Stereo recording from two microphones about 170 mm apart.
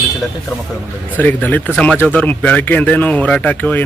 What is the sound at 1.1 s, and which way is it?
Speech, 10° left (ahead or behind).